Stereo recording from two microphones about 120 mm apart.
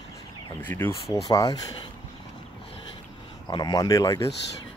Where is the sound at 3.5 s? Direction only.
35° left (ahead or behind).